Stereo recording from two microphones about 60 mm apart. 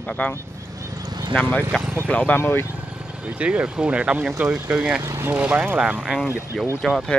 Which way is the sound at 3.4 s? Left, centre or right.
Centre.